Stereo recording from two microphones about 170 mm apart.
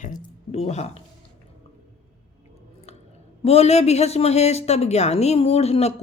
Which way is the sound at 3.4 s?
40° left (ahead or behind).